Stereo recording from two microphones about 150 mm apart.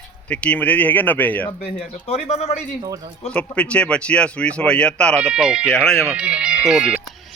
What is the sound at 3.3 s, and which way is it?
Speech, 10° left (ahead or behind).